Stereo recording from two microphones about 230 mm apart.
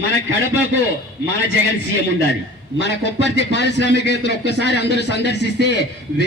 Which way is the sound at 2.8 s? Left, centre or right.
Left.